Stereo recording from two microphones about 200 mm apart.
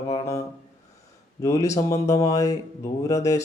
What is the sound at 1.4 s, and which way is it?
Speech, 15° left (ahead or behind).